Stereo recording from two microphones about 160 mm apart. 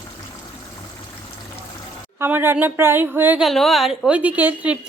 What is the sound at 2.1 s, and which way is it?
A woman's voice, 15° right (ahead or behind).